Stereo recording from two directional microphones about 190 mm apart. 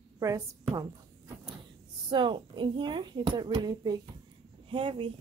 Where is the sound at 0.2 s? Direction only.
15° right (ahead or behind).